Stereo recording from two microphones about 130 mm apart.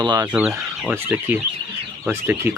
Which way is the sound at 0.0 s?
35° right (ahead or behind).